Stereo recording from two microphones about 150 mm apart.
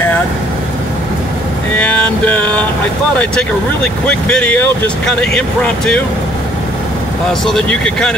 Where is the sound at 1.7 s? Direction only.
10° left (ahead or behind).